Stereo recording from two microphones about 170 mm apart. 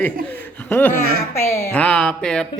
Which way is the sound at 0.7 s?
10° left (ahead or behind).